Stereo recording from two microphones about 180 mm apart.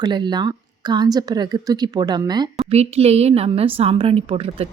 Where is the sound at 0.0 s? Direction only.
25° right (ahead or behind).